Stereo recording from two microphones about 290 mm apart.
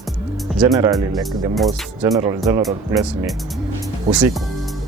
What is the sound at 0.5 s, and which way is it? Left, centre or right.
Speech, centre.